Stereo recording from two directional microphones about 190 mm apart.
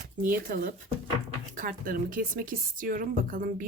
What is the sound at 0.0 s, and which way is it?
A woman's voice, 45° right (ahead or behind).